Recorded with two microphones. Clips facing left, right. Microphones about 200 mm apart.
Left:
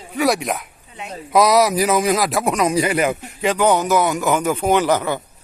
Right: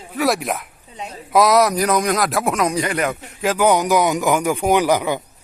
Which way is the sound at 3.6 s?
15° right (ahead or behind).